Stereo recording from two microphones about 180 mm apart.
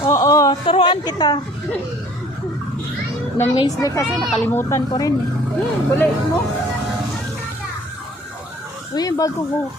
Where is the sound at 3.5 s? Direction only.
25° left (ahead or behind).